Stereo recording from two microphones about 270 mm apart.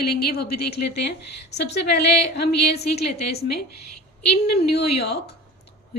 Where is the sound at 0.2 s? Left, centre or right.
Left.